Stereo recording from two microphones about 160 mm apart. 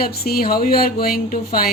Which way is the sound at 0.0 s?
70° left (ahead or behind).